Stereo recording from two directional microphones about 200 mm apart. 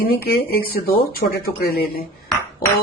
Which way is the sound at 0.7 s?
50° left (ahead or behind).